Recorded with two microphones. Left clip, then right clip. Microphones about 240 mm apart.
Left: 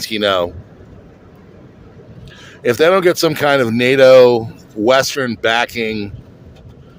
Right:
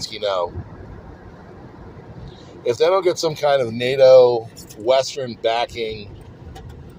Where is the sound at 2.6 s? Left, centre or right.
Left.